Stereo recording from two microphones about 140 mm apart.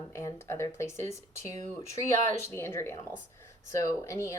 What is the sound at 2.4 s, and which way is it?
Speech, 20° left (ahead or behind).